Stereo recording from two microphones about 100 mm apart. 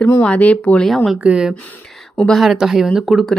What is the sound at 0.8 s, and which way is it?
Speech, centre (ahead or behind).